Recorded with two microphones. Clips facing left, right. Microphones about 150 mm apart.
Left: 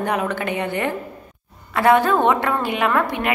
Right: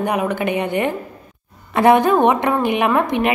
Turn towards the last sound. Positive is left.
turn(degrees=-20)  # may be behind; listen again after turning